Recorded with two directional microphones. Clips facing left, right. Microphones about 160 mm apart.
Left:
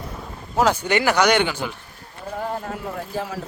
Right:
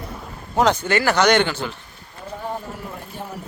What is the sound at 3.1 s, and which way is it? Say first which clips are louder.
Speech: left 7 dB; 90° left.